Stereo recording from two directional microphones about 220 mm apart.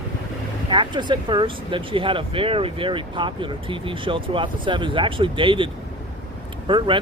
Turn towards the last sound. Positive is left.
turn(degrees=-20)  # may be behind; listen again after turning